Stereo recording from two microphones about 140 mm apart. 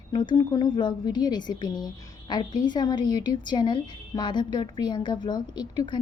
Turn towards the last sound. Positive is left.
turn(degrees=35)  # may be behind; listen again after turning